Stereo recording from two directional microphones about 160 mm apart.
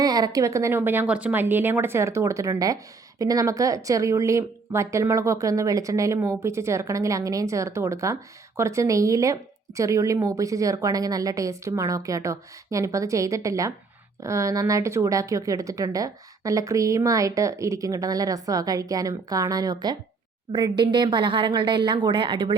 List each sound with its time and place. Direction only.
0.0 s a woman's voice: 25° right (ahead or behind)